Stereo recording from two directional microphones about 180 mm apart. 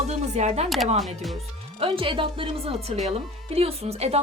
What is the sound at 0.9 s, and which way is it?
Speech, centre (ahead or behind).